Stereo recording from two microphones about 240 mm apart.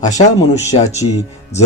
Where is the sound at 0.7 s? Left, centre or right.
Left.